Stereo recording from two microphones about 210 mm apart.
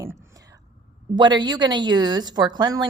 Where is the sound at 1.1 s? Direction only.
20° right (ahead or behind).